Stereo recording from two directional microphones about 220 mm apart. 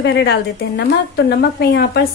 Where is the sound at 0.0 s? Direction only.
50° left (ahead or behind).